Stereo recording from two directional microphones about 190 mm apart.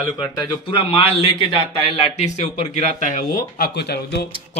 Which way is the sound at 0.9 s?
30° left (ahead or behind).